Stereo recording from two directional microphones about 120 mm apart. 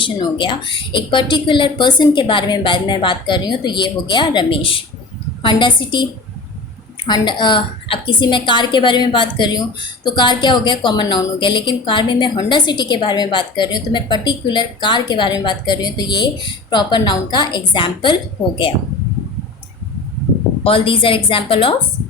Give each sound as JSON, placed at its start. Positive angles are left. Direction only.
{"t": 0.0, "sound": "a woman's voice", "side_deg": 45}
{"t": 7.1, "sound": "a woman's voice", "side_deg": 40}
{"t": 20.7, "sound": "a woman's voice", "side_deg": 50}